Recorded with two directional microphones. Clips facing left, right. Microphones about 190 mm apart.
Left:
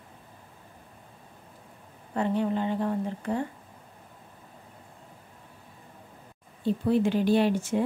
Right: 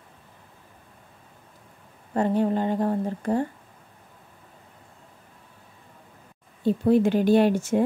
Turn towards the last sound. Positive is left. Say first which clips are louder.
# right 4 dB
turn(degrees=-45)  # may be behind; listen again after turning